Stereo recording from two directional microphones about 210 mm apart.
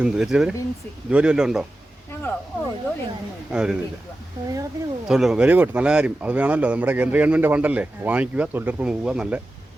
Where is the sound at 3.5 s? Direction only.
5° right (ahead or behind).